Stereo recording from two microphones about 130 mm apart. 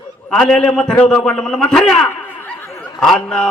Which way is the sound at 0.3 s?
5° left (ahead or behind).